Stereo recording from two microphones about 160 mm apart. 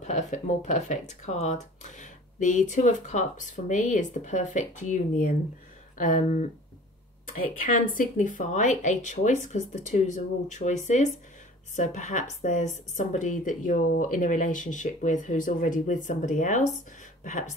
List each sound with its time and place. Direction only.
0.0 s a woman's voice: 50° left (ahead or behind)